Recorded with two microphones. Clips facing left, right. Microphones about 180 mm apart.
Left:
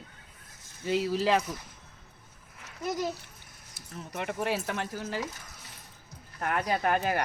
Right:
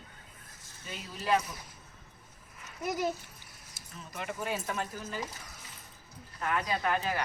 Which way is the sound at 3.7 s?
60° left (ahead or behind).